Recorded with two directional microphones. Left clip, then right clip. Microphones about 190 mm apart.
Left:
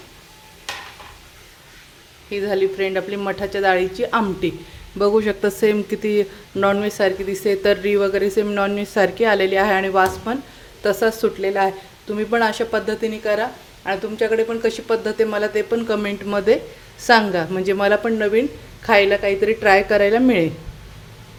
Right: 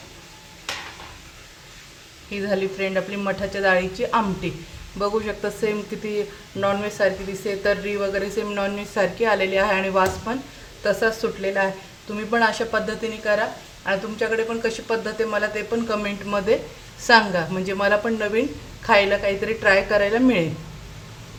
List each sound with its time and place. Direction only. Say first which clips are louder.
2.3 s a woman's voice: left 4 dB; 30° left (ahead or behind)